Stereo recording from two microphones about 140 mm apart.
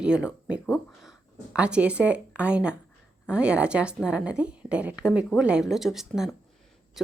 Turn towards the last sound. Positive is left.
turn(degrees=-5)  # may be behind; listen again after turning